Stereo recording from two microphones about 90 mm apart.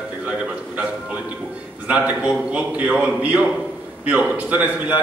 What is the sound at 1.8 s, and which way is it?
A man's voice, 15° right (ahead or behind).